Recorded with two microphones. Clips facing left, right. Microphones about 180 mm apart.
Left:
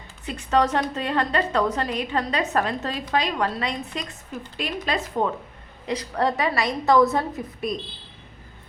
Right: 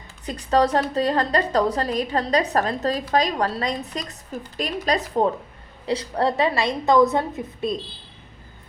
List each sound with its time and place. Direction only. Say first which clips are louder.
0.3 s a woman's voice: right 2 dB; 35° right (ahead or behind)